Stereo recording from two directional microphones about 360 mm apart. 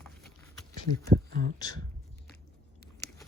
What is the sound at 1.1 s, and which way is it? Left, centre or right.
Speech, right.